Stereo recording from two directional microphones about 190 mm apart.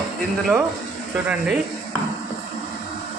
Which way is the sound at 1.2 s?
5° right (ahead or behind).